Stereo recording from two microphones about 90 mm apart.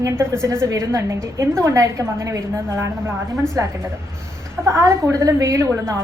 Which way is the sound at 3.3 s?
5° left (ahead or behind).